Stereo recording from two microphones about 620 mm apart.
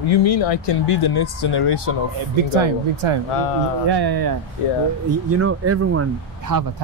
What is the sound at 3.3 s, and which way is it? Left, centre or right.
Speech, left.